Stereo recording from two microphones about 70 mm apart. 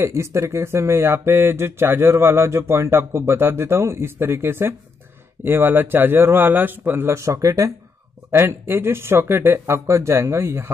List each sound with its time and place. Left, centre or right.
0.0 s speech: right
7.2 s speech: right
8.3 s speech: right